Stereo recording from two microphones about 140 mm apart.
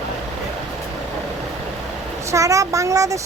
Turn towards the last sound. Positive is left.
turn(degrees=-25)  # may be behind; listen again after turning